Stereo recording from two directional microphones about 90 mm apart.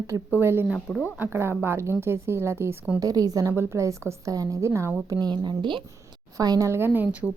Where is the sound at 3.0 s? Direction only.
45° right (ahead or behind).